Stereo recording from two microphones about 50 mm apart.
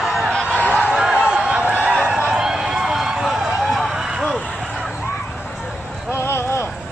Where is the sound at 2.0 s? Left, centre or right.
Right.